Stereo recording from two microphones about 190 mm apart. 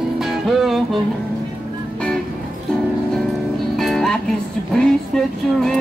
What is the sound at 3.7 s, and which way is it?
Music, centre (ahead or behind).